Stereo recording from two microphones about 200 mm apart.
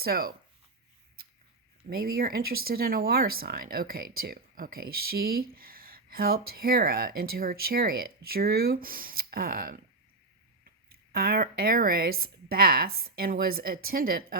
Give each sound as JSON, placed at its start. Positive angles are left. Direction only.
{"t": 0.0, "sound": "speech", "side_deg": -50}
{"t": 1.9, "sound": "speech", "side_deg": -50}
{"t": 10.8, "sound": "speech", "side_deg": -50}